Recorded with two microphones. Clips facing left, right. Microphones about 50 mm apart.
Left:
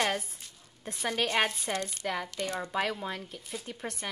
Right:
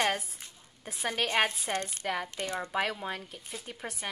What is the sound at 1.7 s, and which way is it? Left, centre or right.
Speech, right.